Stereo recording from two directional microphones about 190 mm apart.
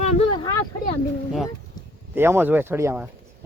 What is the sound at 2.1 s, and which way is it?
Speech, 10° right (ahead or behind).